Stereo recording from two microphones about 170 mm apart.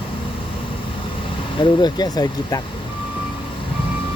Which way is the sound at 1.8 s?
25° left (ahead or behind).